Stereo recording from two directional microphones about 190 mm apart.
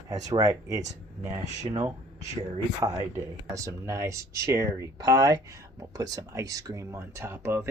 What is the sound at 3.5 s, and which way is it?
Speech, 15° right (ahead or behind).